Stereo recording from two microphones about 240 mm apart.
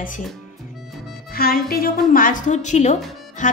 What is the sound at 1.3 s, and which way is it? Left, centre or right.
Speech, left.